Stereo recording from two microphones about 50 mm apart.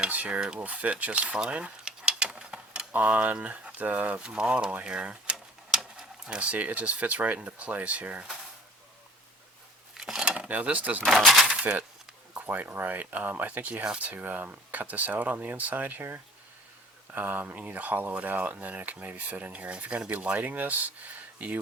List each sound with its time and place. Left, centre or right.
0.3 s speech: right
0.6 s speech: right
1.4 s a sound: right
2.9 s speech: right
4.2 s speech: centre
4.8 s a sound: centre
6.2 s speech: right
10.0 s a sound: centre
10.5 s speech: right
11.0 s speech: centre
12.3 s speech: right
17.1 s speech: right